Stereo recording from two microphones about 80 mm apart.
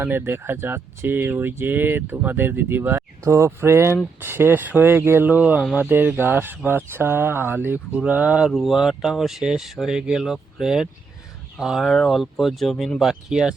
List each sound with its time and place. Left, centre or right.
0.0 s speech: right
7.9 s speech: centre
8.4 s speech: centre
11.9 s speech: centre
13.0 s speech: centre